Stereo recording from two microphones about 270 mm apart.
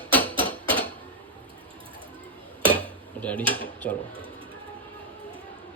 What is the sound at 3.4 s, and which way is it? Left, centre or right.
Speech, centre.